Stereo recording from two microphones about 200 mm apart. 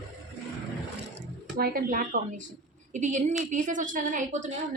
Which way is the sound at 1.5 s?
50° right (ahead or behind).